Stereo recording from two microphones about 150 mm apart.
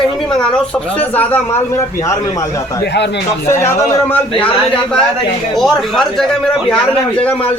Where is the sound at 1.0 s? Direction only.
10° left (ahead or behind).